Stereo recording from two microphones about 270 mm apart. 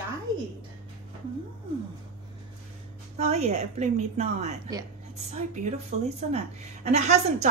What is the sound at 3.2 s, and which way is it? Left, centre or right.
A woman's voice, right.